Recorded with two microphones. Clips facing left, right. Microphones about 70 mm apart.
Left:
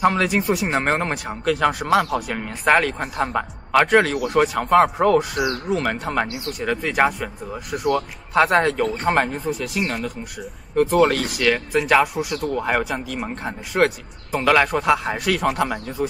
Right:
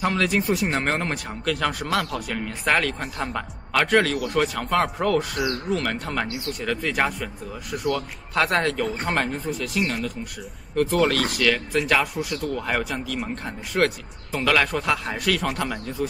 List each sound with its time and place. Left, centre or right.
0.0 s a man's voice: centre